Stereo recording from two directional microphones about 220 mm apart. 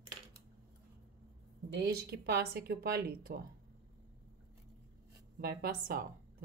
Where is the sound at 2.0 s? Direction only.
45° right (ahead or behind).